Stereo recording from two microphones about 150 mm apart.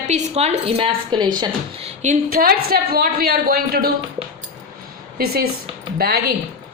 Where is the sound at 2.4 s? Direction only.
90° right.